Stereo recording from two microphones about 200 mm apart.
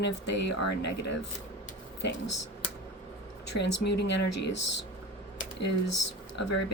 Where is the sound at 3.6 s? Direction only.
55° left (ahead or behind).